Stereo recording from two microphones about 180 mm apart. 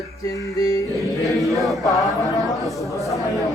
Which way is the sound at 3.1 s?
20° left (ahead or behind).